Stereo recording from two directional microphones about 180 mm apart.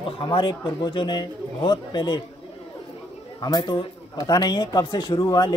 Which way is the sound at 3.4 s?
20° left (ahead or behind).